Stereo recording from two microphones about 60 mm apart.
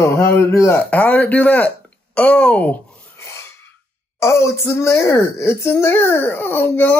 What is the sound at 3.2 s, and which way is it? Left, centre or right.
Filing, left.